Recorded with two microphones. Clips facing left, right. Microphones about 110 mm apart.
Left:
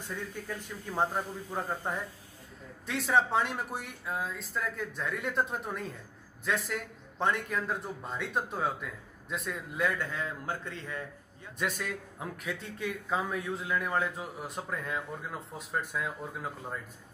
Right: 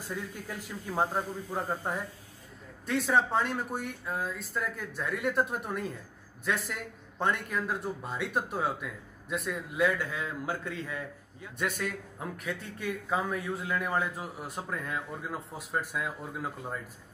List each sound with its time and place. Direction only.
0.1 s a man's voice: 5° right (ahead or behind)